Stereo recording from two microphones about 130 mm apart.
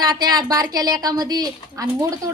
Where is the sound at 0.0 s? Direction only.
30° right (ahead or behind).